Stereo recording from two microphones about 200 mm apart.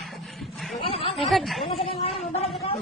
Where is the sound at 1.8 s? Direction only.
25° left (ahead or behind).